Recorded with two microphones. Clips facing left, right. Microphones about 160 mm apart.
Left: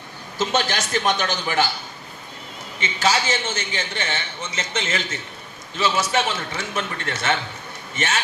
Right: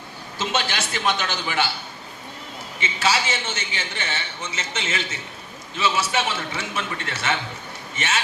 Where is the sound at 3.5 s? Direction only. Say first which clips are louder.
Left 3 dB; 35° left (ahead or behind).